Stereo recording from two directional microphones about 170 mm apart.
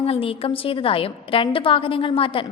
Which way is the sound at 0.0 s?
35° left (ahead or behind).